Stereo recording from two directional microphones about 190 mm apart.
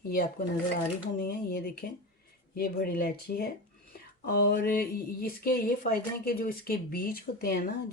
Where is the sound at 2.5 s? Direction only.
50° left (ahead or behind).